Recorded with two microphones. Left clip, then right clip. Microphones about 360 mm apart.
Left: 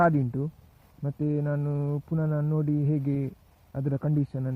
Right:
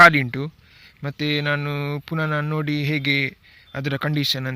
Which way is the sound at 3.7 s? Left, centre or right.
Centre.